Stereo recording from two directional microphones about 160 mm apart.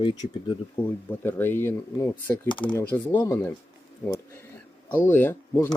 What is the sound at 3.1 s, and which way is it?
Speech, 20° left (ahead or behind).